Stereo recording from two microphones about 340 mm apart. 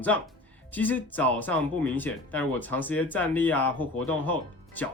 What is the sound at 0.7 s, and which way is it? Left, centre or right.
Speech, centre.